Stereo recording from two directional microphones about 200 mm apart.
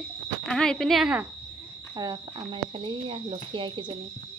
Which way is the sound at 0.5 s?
5° left (ahead or behind).